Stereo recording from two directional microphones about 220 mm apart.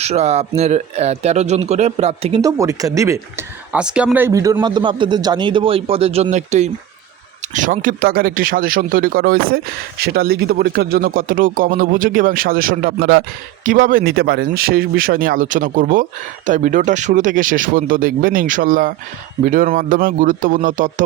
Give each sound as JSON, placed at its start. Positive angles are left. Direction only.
{"t": 0.0, "sound": "speech", "side_deg": -30}
{"t": 2.4, "sound": "speech", "side_deg": -15}